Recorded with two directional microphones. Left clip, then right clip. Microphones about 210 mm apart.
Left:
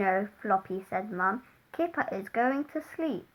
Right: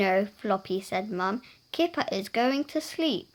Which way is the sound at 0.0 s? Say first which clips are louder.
Right 3 dB; 55° right (ahead or behind).